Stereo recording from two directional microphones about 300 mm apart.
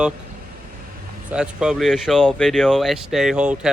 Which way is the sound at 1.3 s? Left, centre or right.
Centre.